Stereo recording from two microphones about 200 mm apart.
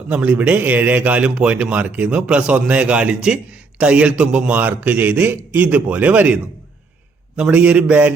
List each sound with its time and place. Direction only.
0.1 s a man's voice: 5° right (ahead or behind)